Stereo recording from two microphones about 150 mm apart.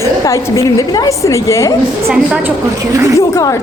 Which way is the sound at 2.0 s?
5° right (ahead or behind).